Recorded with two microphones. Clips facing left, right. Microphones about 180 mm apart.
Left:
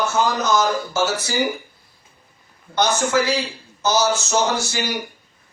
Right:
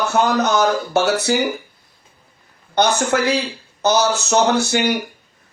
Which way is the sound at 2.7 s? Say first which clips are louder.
Right 2 dB; 60° right (ahead or behind).